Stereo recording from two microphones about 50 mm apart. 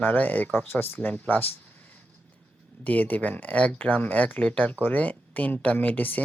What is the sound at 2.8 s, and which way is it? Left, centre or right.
Speech, left.